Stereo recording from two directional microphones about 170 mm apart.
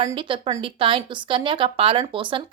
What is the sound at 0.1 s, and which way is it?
A woman's voice, 30° right (ahead or behind).